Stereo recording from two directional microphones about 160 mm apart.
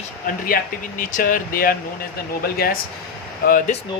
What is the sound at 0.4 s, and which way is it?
Speech, 60° left (ahead or behind).